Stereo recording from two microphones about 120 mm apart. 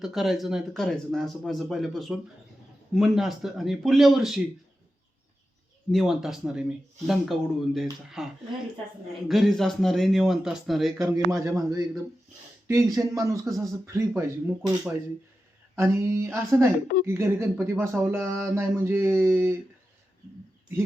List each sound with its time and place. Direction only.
0.0 s speech: 5° right (ahead or behind)
5.9 s speech: centre (ahead or behind)
10.9 s speech: 25° right (ahead or behind)
14.1 s speech: 15° right (ahead or behind)
15.7 s speech: 20° right (ahead or behind)